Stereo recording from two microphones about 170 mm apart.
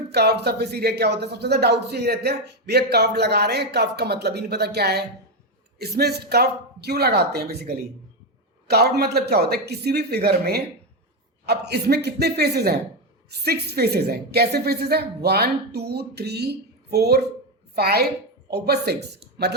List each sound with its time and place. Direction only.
0.1 s speech: 75° right (ahead or behind)
8.7 s speech: 70° right (ahead or behind)